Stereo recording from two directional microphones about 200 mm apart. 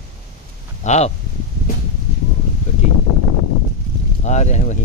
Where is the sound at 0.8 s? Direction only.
35° left (ahead or behind).